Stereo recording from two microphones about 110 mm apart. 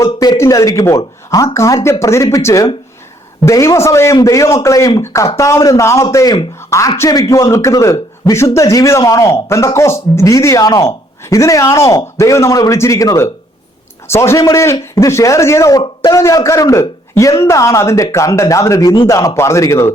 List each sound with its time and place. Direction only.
0.0 s a man's voice: 30° left (ahead or behind)